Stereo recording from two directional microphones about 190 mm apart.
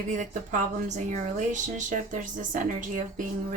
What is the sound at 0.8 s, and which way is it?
Speech, 40° right (ahead or behind).